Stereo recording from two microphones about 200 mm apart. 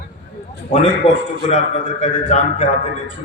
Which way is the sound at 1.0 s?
30° left (ahead or behind).